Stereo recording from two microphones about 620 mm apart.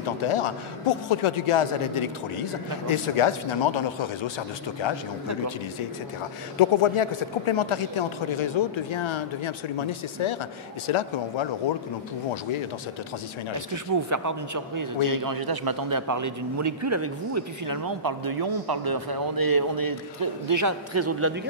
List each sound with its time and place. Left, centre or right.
0.2 s a man's voice: left
6.6 s a man's voice: left
14.0 s a man's voice: right